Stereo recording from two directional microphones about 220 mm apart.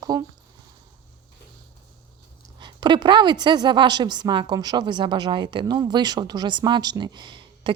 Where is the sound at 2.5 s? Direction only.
20° right (ahead or behind).